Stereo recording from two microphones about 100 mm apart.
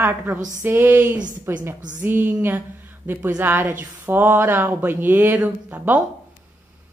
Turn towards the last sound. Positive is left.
turn(degrees=-15)  # may be behind; listen again after turning